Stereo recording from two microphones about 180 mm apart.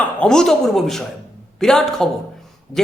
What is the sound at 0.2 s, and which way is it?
A man's voice, 5° left (ahead or behind).